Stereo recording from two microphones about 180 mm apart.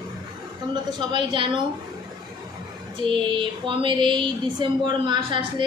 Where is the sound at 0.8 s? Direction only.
25° right (ahead or behind).